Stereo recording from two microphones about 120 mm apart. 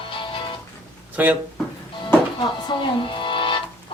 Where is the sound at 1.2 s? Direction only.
15° right (ahead or behind).